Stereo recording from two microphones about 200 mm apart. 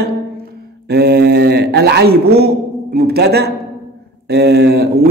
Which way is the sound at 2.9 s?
50° right (ahead or behind).